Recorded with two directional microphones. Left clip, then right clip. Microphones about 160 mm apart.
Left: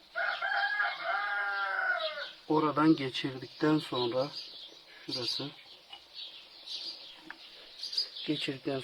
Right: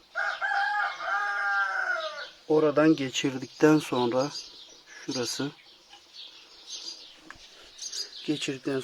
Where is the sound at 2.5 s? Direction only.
30° right (ahead or behind).